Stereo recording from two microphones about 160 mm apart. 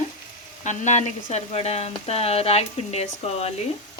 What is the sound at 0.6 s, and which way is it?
Frying, 50° left (ahead or behind).